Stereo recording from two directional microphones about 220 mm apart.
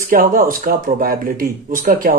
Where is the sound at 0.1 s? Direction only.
40° right (ahead or behind).